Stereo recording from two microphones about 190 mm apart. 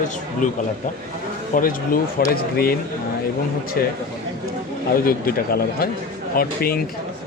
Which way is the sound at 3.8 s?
50° left (ahead or behind).